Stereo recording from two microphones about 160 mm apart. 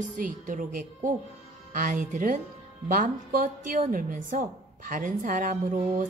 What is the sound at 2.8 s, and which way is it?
A woman's voice, 55° right (ahead or behind).